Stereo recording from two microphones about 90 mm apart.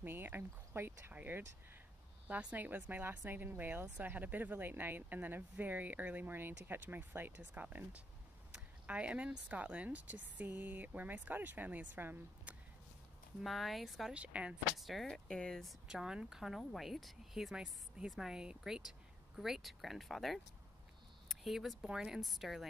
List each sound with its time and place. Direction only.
0.0 s speech: 25° right (ahead or behind)
13.4 s speech: centre (ahead or behind)
14.1 s speech: 15° right (ahead or behind)
14.8 s speech: centre (ahead or behind)
15.9 s speech: 10° right (ahead or behind)